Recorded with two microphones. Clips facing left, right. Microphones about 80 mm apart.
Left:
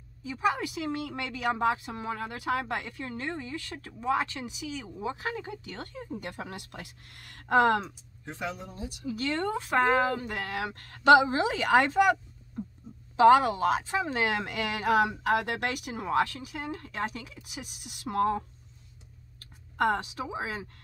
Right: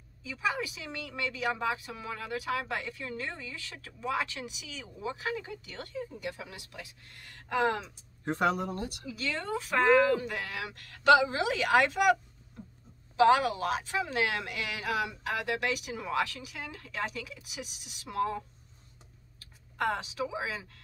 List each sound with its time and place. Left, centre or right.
0.2 s speech: left
8.3 s speech: right
9.0 s speech: left
19.4 s a sound: left
20.2 s speech: left